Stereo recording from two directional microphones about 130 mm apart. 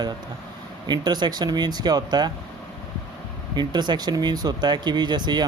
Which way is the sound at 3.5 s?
35° right (ahead or behind).